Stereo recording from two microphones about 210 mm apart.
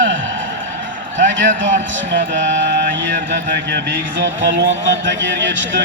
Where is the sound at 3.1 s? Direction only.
50° right (ahead or behind).